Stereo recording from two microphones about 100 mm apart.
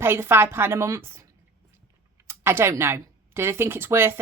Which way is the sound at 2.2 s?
25° right (ahead or behind).